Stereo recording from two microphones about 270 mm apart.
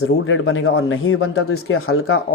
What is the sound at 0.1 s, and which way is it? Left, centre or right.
Speech, left.